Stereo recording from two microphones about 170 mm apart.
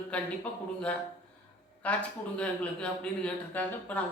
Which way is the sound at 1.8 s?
10° left (ahead or behind).